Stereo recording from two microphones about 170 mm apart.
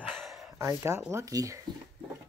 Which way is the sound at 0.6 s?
15° right (ahead or behind).